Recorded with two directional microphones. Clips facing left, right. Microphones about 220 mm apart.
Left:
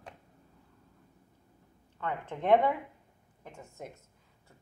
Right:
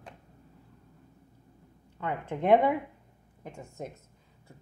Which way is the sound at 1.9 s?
15° right (ahead or behind).